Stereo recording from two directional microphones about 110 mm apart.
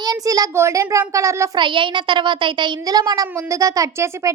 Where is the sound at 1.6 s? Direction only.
45° right (ahead or behind).